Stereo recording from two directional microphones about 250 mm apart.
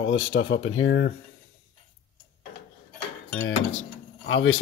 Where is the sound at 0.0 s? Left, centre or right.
Left.